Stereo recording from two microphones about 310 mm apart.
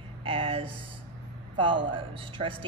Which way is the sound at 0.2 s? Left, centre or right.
Centre.